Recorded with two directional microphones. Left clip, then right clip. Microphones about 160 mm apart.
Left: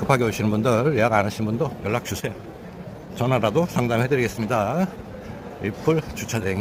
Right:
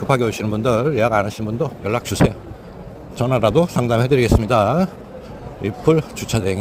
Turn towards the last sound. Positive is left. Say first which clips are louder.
# right 5 dB
turn(degrees=-20)  # may be behind; listen again after turning